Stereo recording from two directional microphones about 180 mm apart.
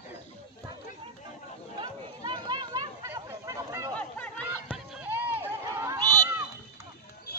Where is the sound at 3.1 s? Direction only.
15° right (ahead or behind).